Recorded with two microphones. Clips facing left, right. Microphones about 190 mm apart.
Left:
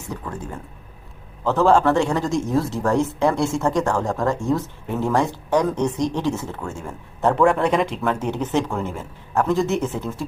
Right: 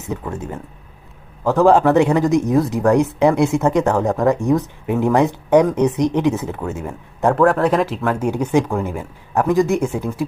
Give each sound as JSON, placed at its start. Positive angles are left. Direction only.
{"t": 0.1, "sound": "speech", "side_deg": -20}
{"t": 7.3, "sound": "speech", "side_deg": 0}